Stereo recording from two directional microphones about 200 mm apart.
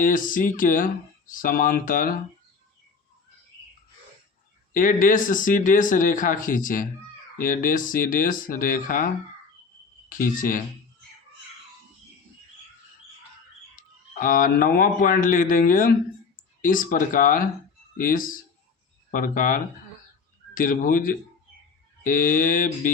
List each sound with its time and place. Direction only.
0.0 s speech: 45° left (ahead or behind)
4.7 s speech: 45° left (ahead or behind)
10.1 s speech: 45° left (ahead or behind)
14.2 s speech: 45° left (ahead or behind)